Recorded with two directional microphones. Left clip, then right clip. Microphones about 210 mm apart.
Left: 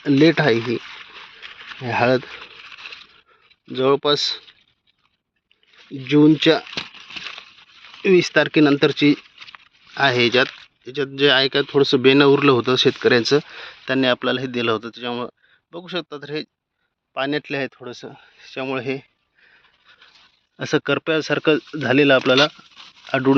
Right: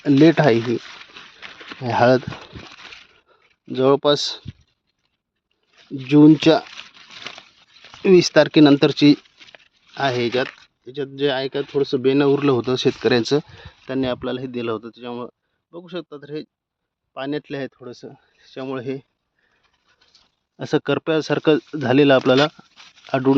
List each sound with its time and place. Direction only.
0.0 s speech: 20° right (ahead or behind)
1.8 s speech: 25° right (ahead or behind)
3.7 s speech: 30° right (ahead or behind)
5.7 s speech: 30° right (ahead or behind)
8.0 s speech: 30° right (ahead or behind)
10.0 s speech: 5° right (ahead or behind)
11.6 s speech: 15° left (ahead or behind)
12.1 s speech: 5° right (ahead or behind)
13.6 s speech: 5° right (ahead or behind)
20.6 s speech: 20° right (ahead or behind)